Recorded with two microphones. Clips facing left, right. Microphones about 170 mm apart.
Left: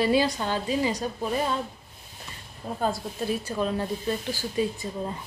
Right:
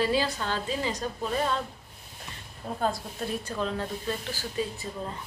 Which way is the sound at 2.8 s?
Centre (ahead or behind).